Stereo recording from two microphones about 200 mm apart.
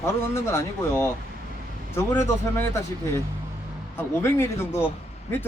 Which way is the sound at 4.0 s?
10° left (ahead or behind).